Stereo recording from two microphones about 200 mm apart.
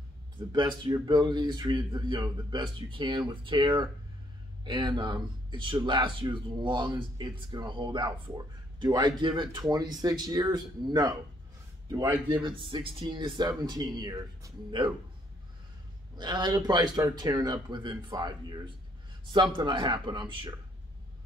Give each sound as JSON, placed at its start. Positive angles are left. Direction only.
{"t": 0.5, "sound": "speech", "side_deg": -20}
{"t": 16.2, "sound": "speech", "side_deg": -20}
{"t": 19.5, "sound": "speech", "side_deg": -25}